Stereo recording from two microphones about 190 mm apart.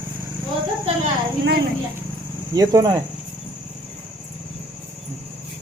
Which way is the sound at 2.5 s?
20° right (ahead or behind).